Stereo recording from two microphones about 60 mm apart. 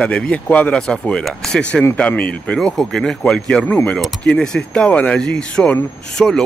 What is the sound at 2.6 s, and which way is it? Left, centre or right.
Speech, centre.